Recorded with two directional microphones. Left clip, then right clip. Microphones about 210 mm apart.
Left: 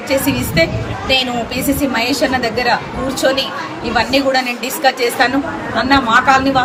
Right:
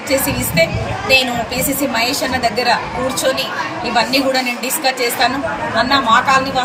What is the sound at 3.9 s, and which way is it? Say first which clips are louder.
A woman's voice: left 1 dB; 5° left (ahead or behind).